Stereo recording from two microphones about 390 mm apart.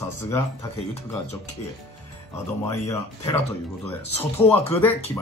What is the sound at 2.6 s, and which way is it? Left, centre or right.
Speech, centre.